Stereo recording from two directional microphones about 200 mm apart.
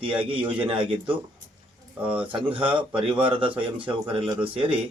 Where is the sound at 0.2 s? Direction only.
25° right (ahead or behind).